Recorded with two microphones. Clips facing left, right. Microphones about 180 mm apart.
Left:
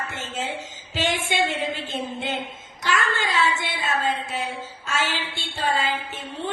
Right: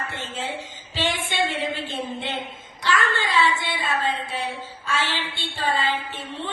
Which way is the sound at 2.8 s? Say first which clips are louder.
Right 1 dB; 45° left (ahead or behind).